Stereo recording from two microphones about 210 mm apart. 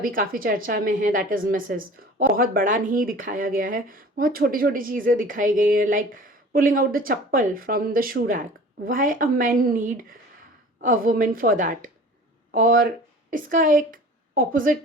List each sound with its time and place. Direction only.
0.0 s a woman's voice: 40° right (ahead or behind)